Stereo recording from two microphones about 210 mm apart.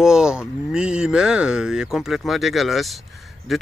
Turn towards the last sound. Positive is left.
turn(degrees=0)  # may be behind; listen again after turning